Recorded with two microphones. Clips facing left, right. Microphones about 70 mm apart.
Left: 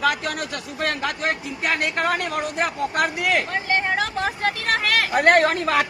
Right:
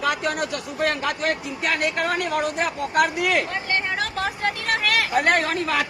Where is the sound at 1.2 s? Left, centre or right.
Left.